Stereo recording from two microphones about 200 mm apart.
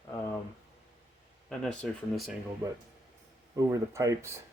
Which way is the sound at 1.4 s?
5° left (ahead or behind).